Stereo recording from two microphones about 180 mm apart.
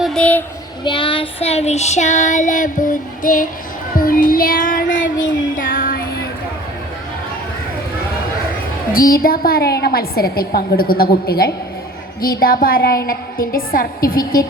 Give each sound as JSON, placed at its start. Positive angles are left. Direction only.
{"t": 0.0, "sound": "a child's voice", "side_deg": 5}
{"t": 0.9, "sound": "child singing", "side_deg": 25}
{"t": 8.9, "sound": "a woman's voice", "side_deg": 55}